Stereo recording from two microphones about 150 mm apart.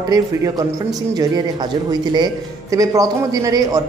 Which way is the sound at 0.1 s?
25° right (ahead or behind).